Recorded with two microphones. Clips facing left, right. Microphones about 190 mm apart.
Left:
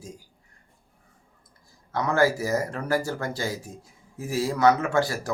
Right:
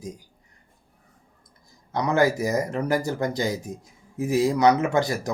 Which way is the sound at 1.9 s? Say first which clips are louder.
Right 1 dB; 20° right (ahead or behind).